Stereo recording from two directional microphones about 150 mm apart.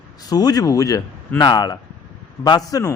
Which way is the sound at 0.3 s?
25° left (ahead or behind).